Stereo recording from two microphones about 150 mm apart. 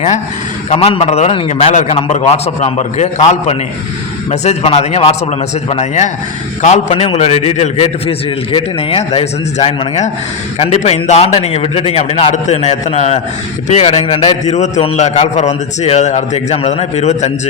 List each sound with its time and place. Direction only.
0.7 s a man's voice: 30° left (ahead or behind)
0.9 s a man's voice: 45° left (ahead or behind)
6.9 s a man's voice: 40° left (ahead or behind)
14.4 s a man's voice: 50° left (ahead or behind)